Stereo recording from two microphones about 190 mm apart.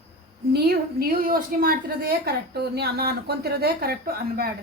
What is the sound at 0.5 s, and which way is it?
A woman's voice, 55° right (ahead or behind).